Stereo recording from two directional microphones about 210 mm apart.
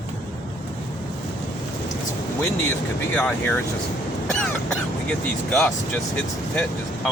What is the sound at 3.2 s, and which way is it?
Speech, 10° left (ahead or behind).